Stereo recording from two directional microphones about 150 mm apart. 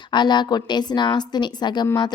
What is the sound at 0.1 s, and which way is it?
A woman's voice, 30° left (ahead or behind).